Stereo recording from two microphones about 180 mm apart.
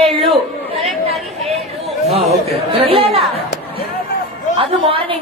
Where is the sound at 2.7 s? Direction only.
30° right (ahead or behind).